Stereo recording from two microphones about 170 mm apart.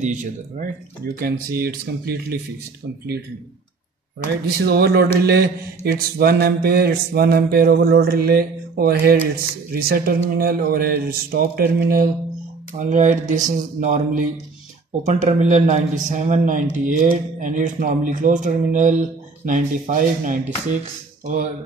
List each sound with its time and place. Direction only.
0.0 s speech: 45° right (ahead or behind)
1.2 s mantra: 65° right (ahead or behind)
4.3 s speech: 65° right (ahead or behind)
5.9 s mantra: 65° right (ahead or behind)
12.7 s speech: 45° right (ahead or behind)